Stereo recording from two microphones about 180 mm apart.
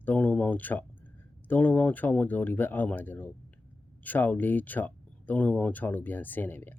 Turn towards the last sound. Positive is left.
turn(degrees=10)  # may be behind; listen again after turning